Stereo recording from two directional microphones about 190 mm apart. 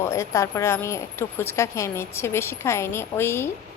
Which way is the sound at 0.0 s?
15° left (ahead or behind).